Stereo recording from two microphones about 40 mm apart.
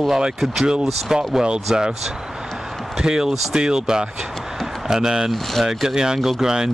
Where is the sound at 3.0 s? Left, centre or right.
Centre.